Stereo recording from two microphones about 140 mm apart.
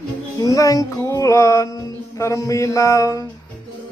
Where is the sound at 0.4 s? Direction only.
25° left (ahead or behind).